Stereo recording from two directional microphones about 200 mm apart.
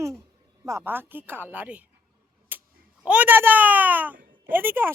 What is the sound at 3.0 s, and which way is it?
A child's voice, 10° right (ahead or behind).